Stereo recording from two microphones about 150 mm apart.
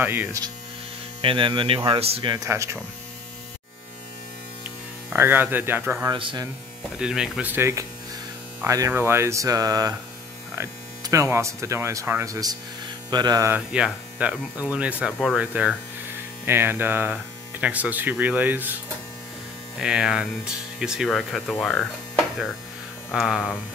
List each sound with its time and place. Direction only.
0.0 s speech: 15° right (ahead or behind)
1.2 s speech: 35° right (ahead or behind)
2.3 s speech: 20° right (ahead or behind)
5.1 s speech: 15° right (ahead or behind)
6.0 s speech: 30° right (ahead or behind)
7.0 s speech: 5° right (ahead or behind); by 13.5 s 25° right (ahead or behind)
13.5 s speech: 5° right (ahead or behind)
19.8 s speech: 5° right (ahead or behind)